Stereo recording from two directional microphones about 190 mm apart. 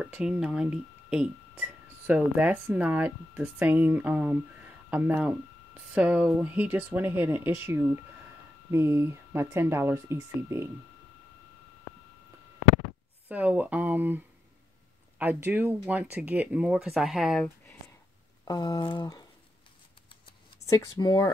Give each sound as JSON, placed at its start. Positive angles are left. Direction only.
{"t": 0.0, "sound": "speech", "side_deg": -5}
{"t": 13.3, "sound": "speech", "side_deg": -10}
{"t": 18.4, "sound": "speech", "side_deg": 20}
{"t": 20.6, "sound": "speech", "side_deg": 15}